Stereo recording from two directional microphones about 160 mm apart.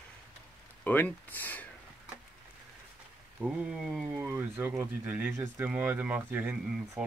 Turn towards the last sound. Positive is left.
turn(degrees=-10)  # may be behind; listen again after turning